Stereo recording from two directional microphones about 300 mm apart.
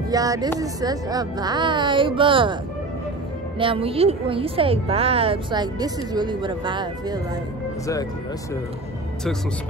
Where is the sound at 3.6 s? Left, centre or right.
Centre.